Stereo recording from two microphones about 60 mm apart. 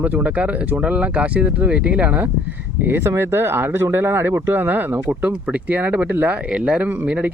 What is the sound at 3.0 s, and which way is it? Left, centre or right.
Speech, right.